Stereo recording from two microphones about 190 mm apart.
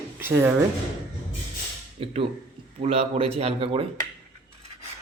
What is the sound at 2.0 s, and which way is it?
Speech, 30° right (ahead or behind).